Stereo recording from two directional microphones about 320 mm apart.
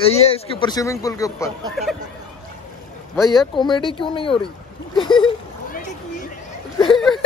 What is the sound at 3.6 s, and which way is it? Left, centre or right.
Speech, centre.